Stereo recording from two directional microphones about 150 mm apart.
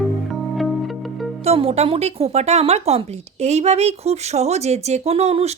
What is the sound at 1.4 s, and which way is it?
Speech, 40° right (ahead or behind).